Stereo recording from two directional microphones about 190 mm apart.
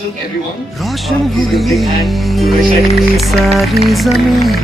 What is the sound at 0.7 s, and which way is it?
Speech, centre (ahead or behind).